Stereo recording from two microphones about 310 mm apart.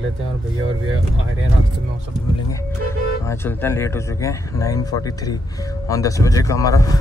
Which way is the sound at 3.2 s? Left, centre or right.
Centre.